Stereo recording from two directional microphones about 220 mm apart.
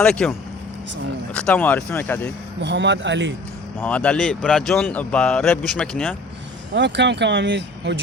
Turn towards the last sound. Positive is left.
turn(degrees=-50)  # may be behind; listen again after turning